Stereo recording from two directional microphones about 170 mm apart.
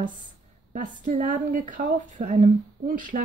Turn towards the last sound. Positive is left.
turn(degrees=-50)  # may be behind; listen again after turning